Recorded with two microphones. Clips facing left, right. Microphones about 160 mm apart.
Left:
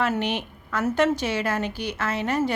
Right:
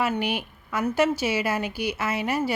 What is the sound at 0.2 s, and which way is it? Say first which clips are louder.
A woman's voice: left 1 dB; 10° right (ahead or behind).